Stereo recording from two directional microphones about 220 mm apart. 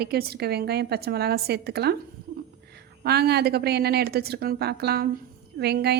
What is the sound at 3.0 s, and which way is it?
A woman's voice, 45° right (ahead or behind).